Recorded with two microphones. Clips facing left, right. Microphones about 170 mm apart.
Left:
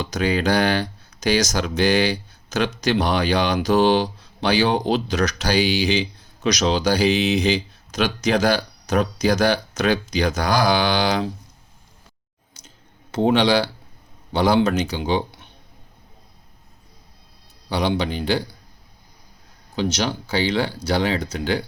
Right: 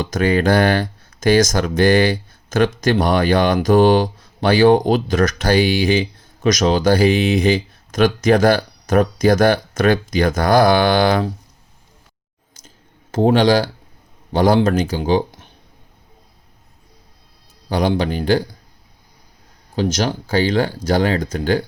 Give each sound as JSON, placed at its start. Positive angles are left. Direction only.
{"t": 0.0, "sound": "speech", "side_deg": -50}
{"t": 12.6, "sound": "clicking", "side_deg": -45}
{"t": 14.3, "sound": "speech", "side_deg": -50}
{"t": 17.7, "sound": "speech", "side_deg": -50}
{"t": 19.7, "sound": "speech", "side_deg": -50}